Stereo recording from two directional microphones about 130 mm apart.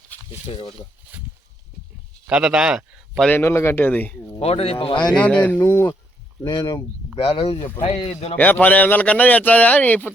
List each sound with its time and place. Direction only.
1.1 s a sound: 10° right (ahead or behind)
2.2 s speech: 5° right (ahead or behind)
3.2 s a man's voice: 15° left (ahead or behind)
4.4 s speech: 50° left (ahead or behind)
5.1 s a man's voice: 10° left (ahead or behind)
6.4 s speech: 35° left (ahead or behind)
8.4 s a man's voice: 15° left (ahead or behind)